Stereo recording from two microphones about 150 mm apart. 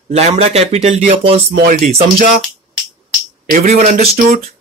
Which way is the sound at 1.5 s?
75° right (ahead or behind).